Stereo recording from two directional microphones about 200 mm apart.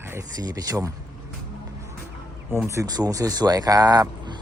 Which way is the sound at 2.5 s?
15° right (ahead or behind).